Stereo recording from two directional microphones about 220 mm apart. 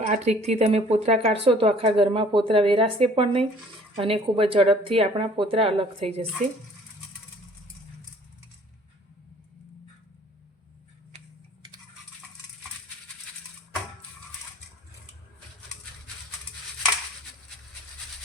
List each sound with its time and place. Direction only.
0.0 s speech: 30° right (ahead or behind)
11.1 s typing: 30° right (ahead or behind)